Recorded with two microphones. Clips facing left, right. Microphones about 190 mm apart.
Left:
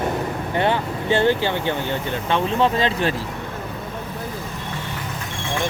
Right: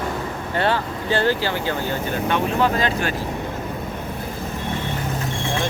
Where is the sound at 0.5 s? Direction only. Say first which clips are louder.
Even; 20° left (ahead or behind).